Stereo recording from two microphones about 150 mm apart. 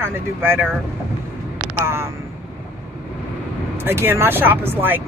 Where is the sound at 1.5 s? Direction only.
15° right (ahead or behind).